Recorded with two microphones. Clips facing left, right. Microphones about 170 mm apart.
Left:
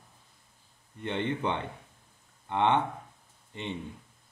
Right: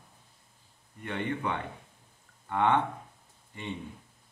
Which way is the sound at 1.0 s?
25° left (ahead or behind).